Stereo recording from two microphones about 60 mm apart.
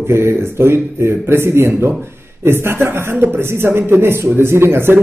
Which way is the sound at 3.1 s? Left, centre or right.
Right.